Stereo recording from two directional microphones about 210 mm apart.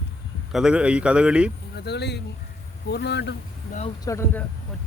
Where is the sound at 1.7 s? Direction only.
50° left (ahead or behind).